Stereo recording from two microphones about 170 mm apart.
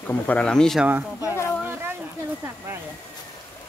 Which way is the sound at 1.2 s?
15° left (ahead or behind).